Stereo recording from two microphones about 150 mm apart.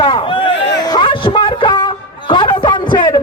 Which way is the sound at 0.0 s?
35° left (ahead or behind).